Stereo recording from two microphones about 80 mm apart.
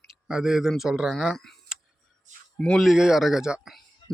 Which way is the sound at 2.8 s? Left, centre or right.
Centre.